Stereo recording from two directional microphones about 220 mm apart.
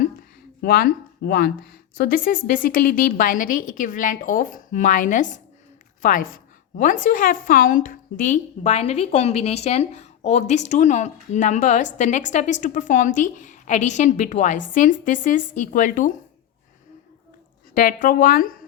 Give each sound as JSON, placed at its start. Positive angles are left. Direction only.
{"t": 0.6, "sound": "a woman's voice", "side_deg": 45}
{"t": 17.7, "sound": "a woman's voice", "side_deg": 40}